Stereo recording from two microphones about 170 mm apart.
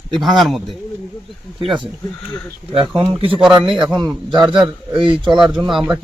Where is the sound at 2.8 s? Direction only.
30° right (ahead or behind).